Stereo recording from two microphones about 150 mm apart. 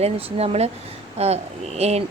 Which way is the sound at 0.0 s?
40° right (ahead or behind).